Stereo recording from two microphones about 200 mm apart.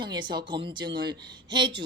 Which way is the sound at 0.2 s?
25° right (ahead or behind).